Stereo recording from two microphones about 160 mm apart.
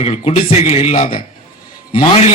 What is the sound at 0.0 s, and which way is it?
Speech, 40° left (ahead or behind).